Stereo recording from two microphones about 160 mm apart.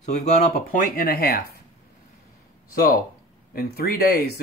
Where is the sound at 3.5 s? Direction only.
70° left (ahead or behind).